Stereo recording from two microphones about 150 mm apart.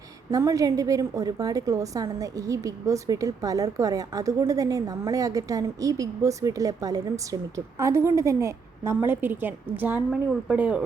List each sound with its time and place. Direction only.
0.3 s a woman's voice: 20° right (ahead or behind)